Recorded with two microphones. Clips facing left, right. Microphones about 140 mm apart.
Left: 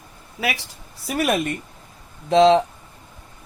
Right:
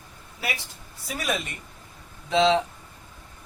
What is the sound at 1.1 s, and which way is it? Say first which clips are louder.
Speech: left 8 dB; 60° left (ahead or behind).